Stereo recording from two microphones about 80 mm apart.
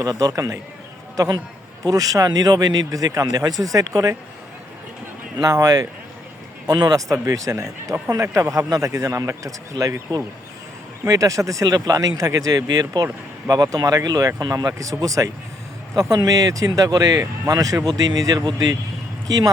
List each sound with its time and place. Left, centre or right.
0.0 s a man's voice: right
5.4 s a man's voice: right